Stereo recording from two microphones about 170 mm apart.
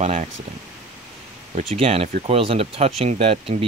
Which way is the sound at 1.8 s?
35° right (ahead or behind).